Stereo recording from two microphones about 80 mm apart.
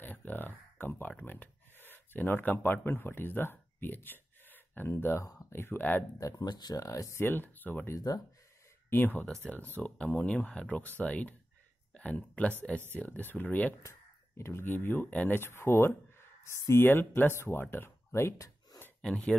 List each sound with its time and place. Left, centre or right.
0.0 s speech: left
6.1 s speech: left
7.2 s speech: left
7.9 s speech: left
8.9 s speech: left
13.8 s speech: left
18.9 s speech: centre